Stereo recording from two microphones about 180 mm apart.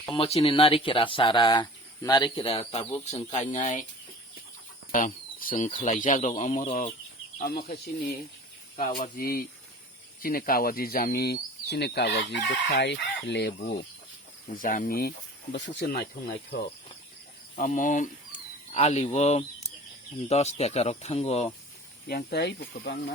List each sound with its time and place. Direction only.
0.1 s speech: 35° left (ahead or behind)
4.9 s speech: 45° left (ahead or behind)
7.3 s speech: 60° left (ahead or behind)
14.5 s speech: 50° left (ahead or behind)
15.5 s speech: 80° left
16.2 s speech: 55° left (ahead or behind)
17.6 s speech: 45° left (ahead or behind)
22.0 s speech: 65° left (ahead or behind)